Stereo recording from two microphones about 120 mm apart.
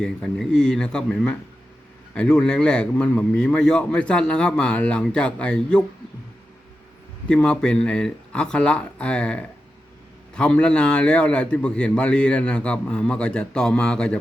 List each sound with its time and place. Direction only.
0.0 s a man's voice: 5° left (ahead or behind)
7.3 s a man's voice: 10° left (ahead or behind)